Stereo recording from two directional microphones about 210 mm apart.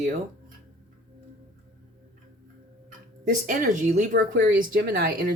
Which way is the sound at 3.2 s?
40° right (ahead or behind).